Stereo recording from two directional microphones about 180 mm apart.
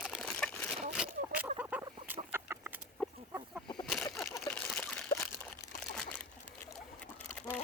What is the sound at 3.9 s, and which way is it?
Water, centre (ahead or behind).